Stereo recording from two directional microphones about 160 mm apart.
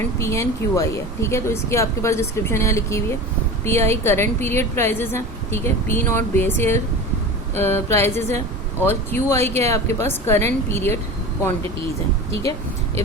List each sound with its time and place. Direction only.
0.2 s a woman's voice: 20° left (ahead or behind)
12.3 s speech: 20° left (ahead or behind)